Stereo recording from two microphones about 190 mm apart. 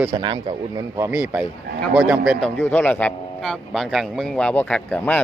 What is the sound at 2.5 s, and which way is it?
A man's voice, 10° left (ahead or behind).